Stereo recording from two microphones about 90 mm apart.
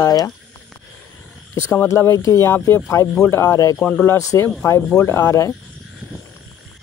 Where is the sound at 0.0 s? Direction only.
45° left (ahead or behind).